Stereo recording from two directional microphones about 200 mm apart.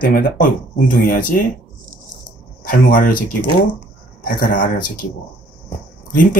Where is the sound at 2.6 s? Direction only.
45° left (ahead or behind).